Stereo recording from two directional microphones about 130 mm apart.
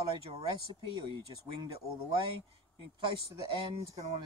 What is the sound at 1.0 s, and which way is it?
Speech, 40° right (ahead or behind).